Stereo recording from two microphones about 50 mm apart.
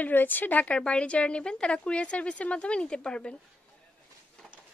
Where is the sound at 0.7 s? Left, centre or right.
Left.